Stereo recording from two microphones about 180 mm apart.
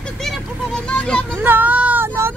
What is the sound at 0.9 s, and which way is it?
Speech, 5° left (ahead or behind).